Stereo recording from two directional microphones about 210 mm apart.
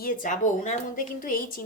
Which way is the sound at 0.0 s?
40° left (ahead or behind).